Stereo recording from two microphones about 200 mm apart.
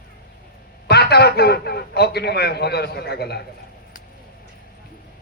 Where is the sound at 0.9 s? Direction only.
55° left (ahead or behind).